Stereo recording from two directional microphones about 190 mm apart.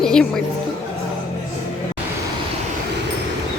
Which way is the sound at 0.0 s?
5° left (ahead or behind).